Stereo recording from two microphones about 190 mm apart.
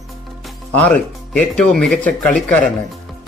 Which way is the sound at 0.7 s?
5° left (ahead or behind).